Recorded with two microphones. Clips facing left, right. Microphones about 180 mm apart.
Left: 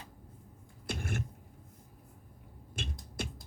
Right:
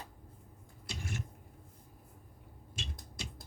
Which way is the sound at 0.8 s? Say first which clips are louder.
Left 5 dB; 55° left (ahead or behind).